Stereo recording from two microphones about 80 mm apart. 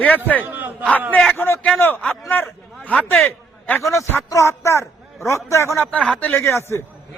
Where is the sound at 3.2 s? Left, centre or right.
Left.